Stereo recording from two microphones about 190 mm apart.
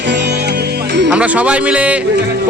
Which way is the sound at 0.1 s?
65° right (ahead or behind).